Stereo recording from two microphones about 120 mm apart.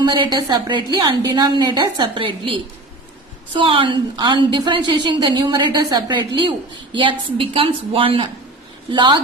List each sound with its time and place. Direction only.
0.0 s a woman's voice: 35° right (ahead or behind)
3.6 s a woman's voice: 45° right (ahead or behind)